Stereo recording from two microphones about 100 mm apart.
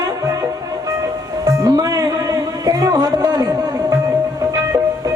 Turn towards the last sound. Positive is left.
turn(degrees=-35)  # may be behind; listen again after turning